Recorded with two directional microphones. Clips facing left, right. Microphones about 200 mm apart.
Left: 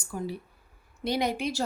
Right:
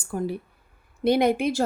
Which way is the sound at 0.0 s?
55° right (ahead or behind).